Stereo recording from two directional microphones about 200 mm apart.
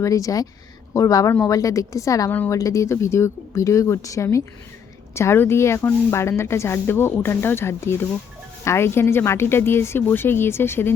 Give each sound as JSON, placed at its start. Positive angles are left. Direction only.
{"t": 0.0, "sound": "a woman's voice", "side_deg": 15}